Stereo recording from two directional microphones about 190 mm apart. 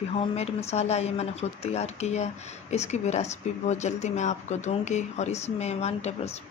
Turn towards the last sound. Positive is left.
turn(degrees=35)  # may be behind; listen again after turning